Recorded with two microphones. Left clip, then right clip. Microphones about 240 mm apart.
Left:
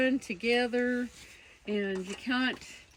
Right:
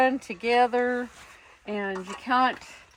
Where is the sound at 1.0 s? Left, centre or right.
Centre.